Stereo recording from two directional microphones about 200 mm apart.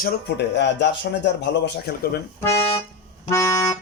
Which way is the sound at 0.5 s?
60° left (ahead or behind).